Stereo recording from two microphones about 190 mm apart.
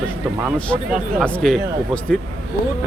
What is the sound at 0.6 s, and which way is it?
Speech, 5° left (ahead or behind).